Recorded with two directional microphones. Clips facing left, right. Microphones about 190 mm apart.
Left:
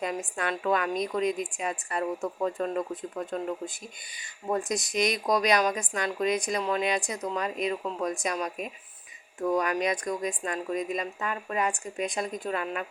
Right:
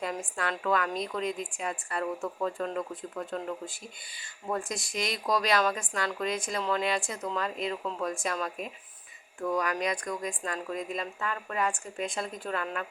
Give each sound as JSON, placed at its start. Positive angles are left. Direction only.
{"t": 0.0, "sound": "speech", "side_deg": 20}